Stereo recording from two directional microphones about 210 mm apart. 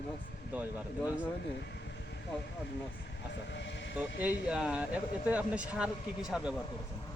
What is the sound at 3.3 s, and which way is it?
Sheep, 55° left (ahead or behind).